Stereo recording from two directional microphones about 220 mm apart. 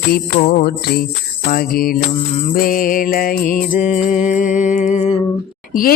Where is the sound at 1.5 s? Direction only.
40° left (ahead or behind).